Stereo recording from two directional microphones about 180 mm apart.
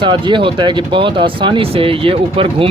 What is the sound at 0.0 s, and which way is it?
Speech, 25° right (ahead or behind).